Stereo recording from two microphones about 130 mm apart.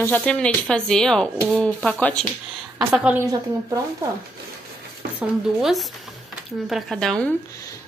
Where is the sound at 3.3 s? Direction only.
25° right (ahead or behind).